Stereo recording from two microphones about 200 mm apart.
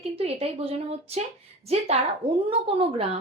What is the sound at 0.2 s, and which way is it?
A woman's voice, 30° right (ahead or behind).